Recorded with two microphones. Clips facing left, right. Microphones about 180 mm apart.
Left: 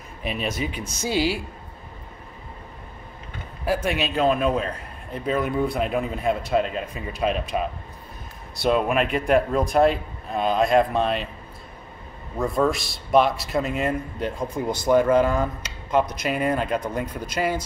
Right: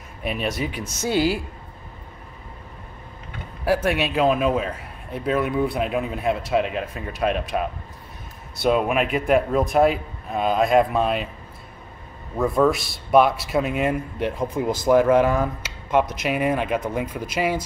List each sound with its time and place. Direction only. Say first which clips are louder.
0.2 s a man's voice: right 2 dB; centre (ahead or behind)
1.1 s speech: right 2 dB; 50° right (ahead or behind)
3.6 s a man's voice: right 3 dB; 5° right (ahead or behind)
8.6 s a man's voice: right 1 dB; 5° right (ahead or behind)
12.4 s a man's voice: right 3 dB; 5° right (ahead or behind)